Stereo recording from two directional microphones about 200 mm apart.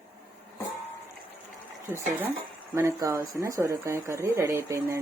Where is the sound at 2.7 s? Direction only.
15° right (ahead or behind).